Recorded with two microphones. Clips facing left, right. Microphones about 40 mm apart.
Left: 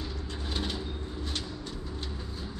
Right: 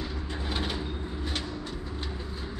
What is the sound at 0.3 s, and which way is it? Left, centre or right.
Vehicle, centre.